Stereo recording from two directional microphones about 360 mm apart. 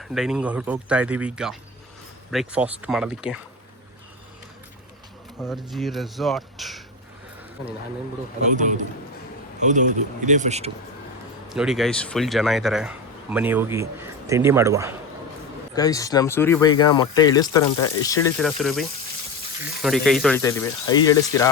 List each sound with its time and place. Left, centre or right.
0.0 s speech: centre
5.4 s speech: centre
9.6 s speech: centre
11.4 s speech: centre
15.7 s speech: centre